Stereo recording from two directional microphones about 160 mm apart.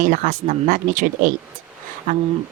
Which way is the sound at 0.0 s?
55° right (ahead or behind).